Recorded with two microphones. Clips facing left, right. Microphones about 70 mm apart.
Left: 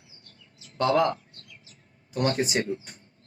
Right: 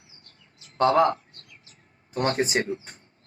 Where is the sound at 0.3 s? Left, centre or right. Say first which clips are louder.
Left 1 dB; right.